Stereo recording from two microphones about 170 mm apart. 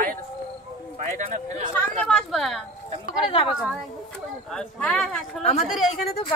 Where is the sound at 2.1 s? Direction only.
Centre (ahead or behind).